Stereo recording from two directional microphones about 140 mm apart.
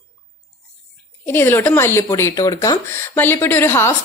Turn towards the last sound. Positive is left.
turn(degrees=15)  # may be behind; listen again after turning